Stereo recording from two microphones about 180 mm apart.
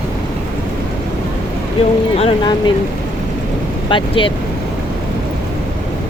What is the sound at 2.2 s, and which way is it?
Speech, 30° left (ahead or behind).